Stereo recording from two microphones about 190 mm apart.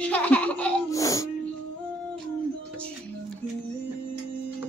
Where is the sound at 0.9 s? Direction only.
15° left (ahead or behind).